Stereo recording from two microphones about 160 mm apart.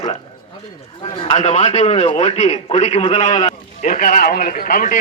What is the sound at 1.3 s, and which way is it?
A man's voice, 45° left (ahead or behind).